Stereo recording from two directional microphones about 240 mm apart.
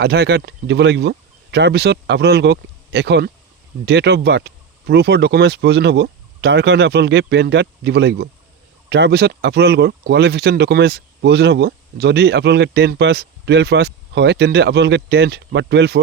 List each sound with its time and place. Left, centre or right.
0.0 s speech: right